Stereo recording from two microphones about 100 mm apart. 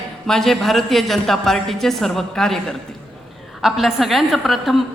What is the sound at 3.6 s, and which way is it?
A woman's voice, centre (ahead or behind).